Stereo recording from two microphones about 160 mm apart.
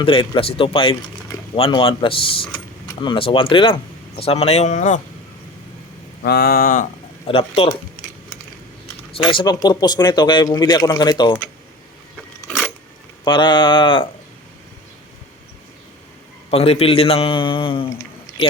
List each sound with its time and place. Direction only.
0.0 s a man's voice: 35° left (ahead or behind)
6.2 s a sound: 75° left (ahead or behind)
7.3 s a man's voice: 35° left (ahead or behind)
9.1 s a man's voice: 30° left (ahead or behind)
12.5 s a sound: 5° left (ahead or behind)
13.2 s speech: 30° left (ahead or behind)
16.5 s a man's voice: 40° left (ahead or behind)